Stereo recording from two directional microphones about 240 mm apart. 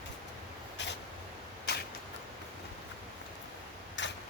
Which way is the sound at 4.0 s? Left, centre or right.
Left.